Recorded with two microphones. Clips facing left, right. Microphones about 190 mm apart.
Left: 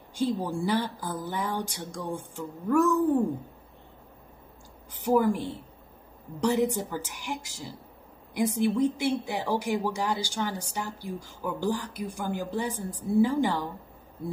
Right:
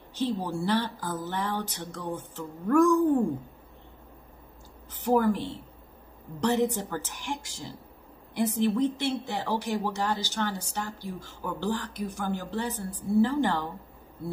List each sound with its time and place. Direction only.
0.5 s speech: 10° left (ahead or behind)
5.0 s speech: 10° left (ahead or behind)